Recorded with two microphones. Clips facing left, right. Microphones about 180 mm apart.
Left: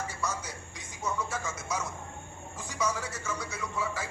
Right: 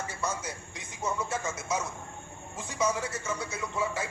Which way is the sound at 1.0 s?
25° right (ahead or behind).